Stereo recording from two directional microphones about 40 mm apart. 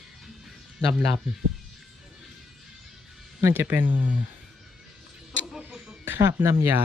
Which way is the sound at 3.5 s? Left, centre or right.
Right.